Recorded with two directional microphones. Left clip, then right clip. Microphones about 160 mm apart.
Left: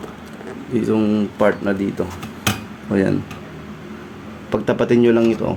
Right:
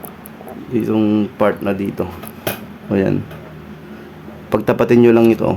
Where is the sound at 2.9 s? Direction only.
15° right (ahead or behind).